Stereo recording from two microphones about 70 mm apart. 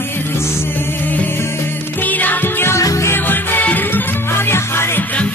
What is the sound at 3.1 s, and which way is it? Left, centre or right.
Music, left.